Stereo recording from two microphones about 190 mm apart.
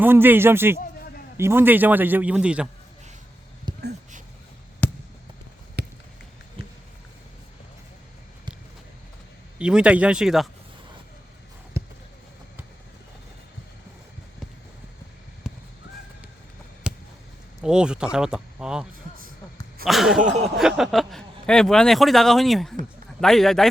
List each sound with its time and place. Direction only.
0.0 s speech: 10° right (ahead or behind)
3.7 s a sound: 20° right (ahead or behind)
4.8 s fireworks: 10° left (ahead or behind)
5.8 s a sound: 60° right (ahead or behind)
6.6 s a sound: 30° right (ahead or behind)
9.6 s speech: 5° right (ahead or behind)
11.8 s basketball bounce: 15° right (ahead or behind)
15.4 s crow: 5° right (ahead or behind)
16.9 s a sound: 5° right (ahead or behind)
17.6 s speech: 5° right (ahead or behind)
20.2 s speech: 35° right (ahead or behind)
20.6 s speech: centre (ahead or behind)